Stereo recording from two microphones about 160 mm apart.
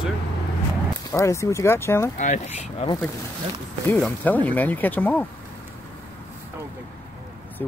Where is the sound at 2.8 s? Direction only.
40° left (ahead or behind).